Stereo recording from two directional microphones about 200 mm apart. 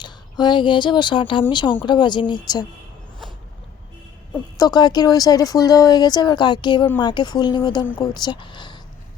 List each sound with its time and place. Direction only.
0.0 s speech: 20° left (ahead or behind)
4.5 s speech: 20° left (ahead or behind)